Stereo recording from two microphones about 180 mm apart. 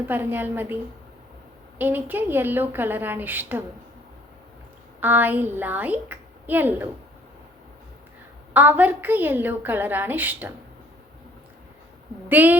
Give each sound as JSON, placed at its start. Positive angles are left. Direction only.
{"t": 0.0, "sound": "a woman's voice", "side_deg": -10}
{"t": 1.8, "sound": "a woman's voice", "side_deg": -10}
{"t": 4.9, "sound": "a woman's voice", "side_deg": -10}
{"t": 8.5, "sound": "a woman's voice", "side_deg": -10}
{"t": 12.3, "sound": "a woman's voice", "side_deg": -10}